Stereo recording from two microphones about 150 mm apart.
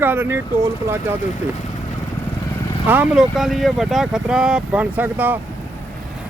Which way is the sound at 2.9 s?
10° right (ahead or behind).